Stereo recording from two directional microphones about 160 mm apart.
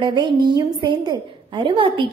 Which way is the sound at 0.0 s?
30° right (ahead or behind).